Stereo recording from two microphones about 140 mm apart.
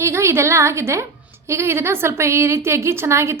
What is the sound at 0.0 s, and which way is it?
A woman's voice, 20° right (ahead or behind).